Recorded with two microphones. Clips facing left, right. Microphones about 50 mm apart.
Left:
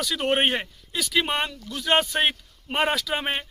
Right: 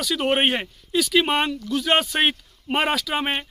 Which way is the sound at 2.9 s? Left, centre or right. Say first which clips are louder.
Right 2 dB; centre.